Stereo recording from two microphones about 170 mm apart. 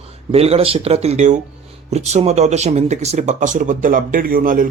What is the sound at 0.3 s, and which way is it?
Speech, 35° right (ahead or behind).